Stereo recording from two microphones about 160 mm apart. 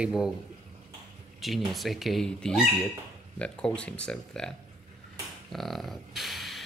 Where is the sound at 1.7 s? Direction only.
Centre (ahead or behind).